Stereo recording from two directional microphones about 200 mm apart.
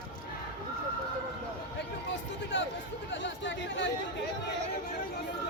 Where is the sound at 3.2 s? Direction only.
65° left (ahead or behind).